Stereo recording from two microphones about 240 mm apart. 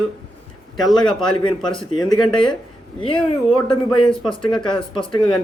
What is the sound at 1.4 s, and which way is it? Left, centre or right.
A man's voice, centre.